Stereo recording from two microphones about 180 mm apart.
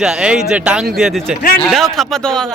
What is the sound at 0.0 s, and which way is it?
Speech, 5° right (ahead or behind).